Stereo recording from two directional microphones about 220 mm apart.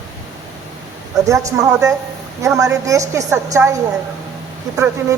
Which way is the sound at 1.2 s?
15° right (ahead or behind).